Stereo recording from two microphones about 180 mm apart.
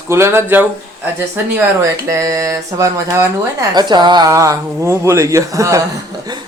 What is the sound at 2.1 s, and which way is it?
Speech, 15° right (ahead or behind).